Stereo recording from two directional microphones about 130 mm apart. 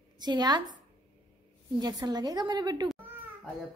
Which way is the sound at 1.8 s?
30° right (ahead or behind).